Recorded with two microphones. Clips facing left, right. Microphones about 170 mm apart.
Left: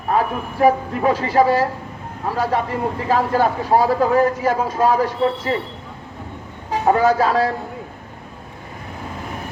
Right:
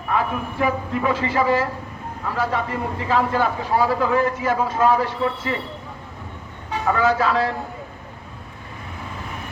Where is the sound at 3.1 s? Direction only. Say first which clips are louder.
Left 2 dB; 40° left (ahead or behind).